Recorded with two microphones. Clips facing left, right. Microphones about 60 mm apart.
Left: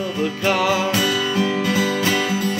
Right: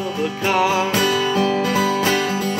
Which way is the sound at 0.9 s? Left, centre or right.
Right.